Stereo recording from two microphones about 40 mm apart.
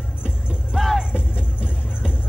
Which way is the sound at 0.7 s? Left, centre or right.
Centre.